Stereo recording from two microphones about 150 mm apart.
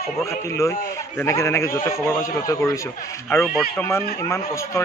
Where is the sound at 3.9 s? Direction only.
15° left (ahead or behind).